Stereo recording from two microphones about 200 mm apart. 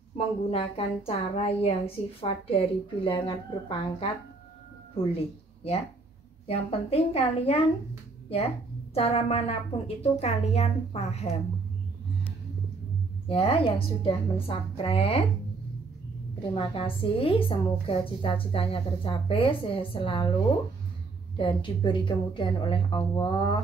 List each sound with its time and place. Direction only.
0.4 s a woman's voice: 30° left (ahead or behind)
8.9 s a woman's voice: 30° left (ahead or behind)
13.3 s a woman's voice: 30° left (ahead or behind)
16.5 s a woman's voice: 25° left (ahead or behind)
21.4 s a woman's voice: 25° left (ahead or behind)